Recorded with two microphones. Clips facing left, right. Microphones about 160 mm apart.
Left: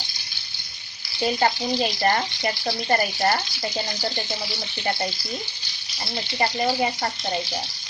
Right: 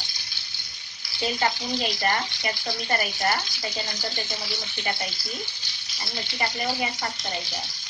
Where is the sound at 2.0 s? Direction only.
35° left (ahead or behind).